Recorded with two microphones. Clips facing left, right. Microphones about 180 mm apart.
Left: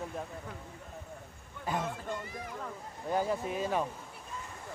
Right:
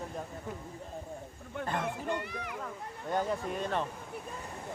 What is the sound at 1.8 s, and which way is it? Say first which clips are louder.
Speech: right 3 dB; 65° right (ahead or behind).